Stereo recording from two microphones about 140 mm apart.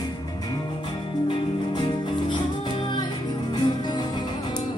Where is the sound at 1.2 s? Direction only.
35° left (ahead or behind).